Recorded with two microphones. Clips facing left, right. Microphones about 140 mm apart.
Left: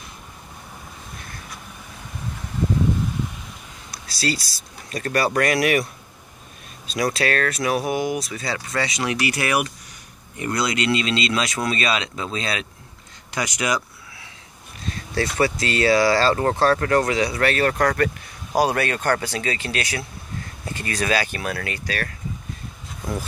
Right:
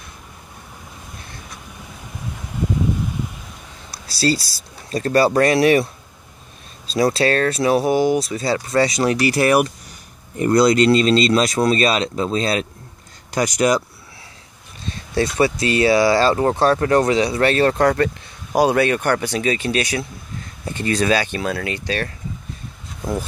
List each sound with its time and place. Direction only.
3.9 s speech: 30° right (ahead or behind)
6.9 s speech: 30° right (ahead or behind)
14.9 s speech: 20° right (ahead or behind)